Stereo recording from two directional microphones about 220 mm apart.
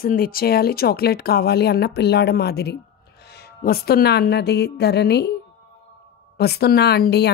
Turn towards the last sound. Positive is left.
turn(degrees=45)  # may be behind; listen again after turning